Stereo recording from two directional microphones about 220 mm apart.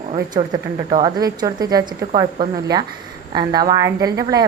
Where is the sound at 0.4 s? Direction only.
15° right (ahead or behind).